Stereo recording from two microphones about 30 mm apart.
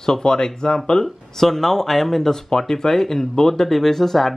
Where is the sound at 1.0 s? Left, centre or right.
Centre.